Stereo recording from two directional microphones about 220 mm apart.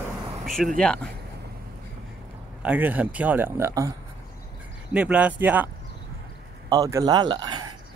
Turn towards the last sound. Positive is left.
turn(degrees=-20)  # may be behind; listen again after turning